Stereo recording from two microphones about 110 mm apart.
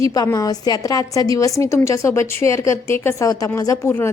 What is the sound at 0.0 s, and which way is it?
A woman's voice, 30° left (ahead or behind).